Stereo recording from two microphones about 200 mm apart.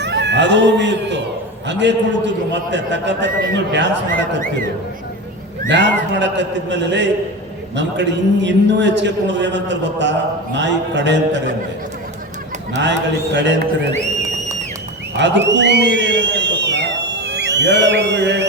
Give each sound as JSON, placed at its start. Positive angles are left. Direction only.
{"t": 0.0, "sound": "a man's voice", "side_deg": -60}
{"t": 5.6, "sound": "a man's voice", "side_deg": -60}
{"t": 12.8, "sound": "a man's voice", "side_deg": -60}
{"t": 15.2, "sound": "speech", "side_deg": -60}